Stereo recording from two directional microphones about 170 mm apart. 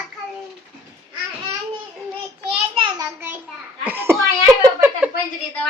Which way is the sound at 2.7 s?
30° right (ahead or behind).